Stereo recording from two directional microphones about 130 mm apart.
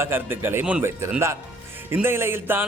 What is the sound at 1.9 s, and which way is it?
Speech, 15° right (ahead or behind).